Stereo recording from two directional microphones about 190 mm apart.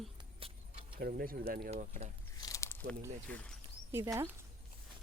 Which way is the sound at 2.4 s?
15° left (ahead or behind).